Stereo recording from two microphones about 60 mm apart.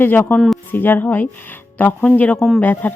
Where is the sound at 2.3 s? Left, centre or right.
Centre.